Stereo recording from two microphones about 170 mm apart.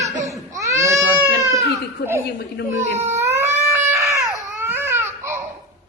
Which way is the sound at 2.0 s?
65° left (ahead or behind).